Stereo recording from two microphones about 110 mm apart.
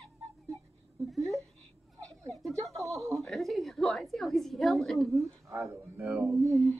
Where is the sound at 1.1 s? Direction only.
Centre (ahead or behind).